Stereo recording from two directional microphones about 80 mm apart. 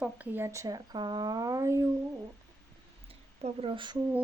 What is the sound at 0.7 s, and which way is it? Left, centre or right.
Speech, right.